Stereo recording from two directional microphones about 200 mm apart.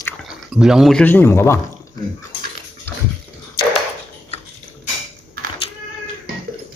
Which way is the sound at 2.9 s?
10° left (ahead or behind).